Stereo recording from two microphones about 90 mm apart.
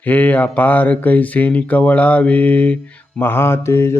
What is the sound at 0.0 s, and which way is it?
Speech, 15° left (ahead or behind).